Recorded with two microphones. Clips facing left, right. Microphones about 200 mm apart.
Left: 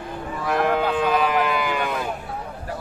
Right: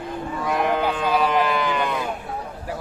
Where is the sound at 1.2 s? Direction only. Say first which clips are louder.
Right 1 dB; 5° left (ahead or behind).